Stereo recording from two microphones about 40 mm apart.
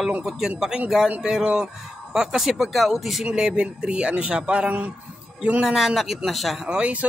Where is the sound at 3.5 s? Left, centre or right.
Right.